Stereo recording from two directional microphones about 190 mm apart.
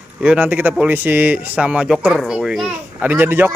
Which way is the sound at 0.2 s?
5° right (ahead or behind).